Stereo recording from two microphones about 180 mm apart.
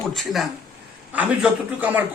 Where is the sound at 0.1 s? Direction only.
Centre (ahead or behind).